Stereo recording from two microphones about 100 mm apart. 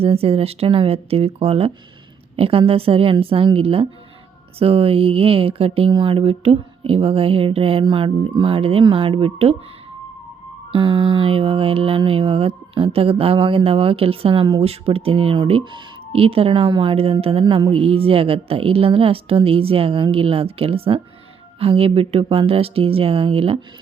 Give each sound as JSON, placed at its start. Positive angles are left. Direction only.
{"t": 0.0, "sound": "speech", "side_deg": -75}
{"t": 5.9, "sound": "speech", "side_deg": -60}
{"t": 10.7, "sound": "speech", "side_deg": -55}
{"t": 14.6, "sound": "speech", "side_deg": -85}